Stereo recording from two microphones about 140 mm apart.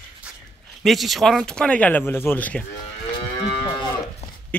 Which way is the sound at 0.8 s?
Centre (ahead or behind).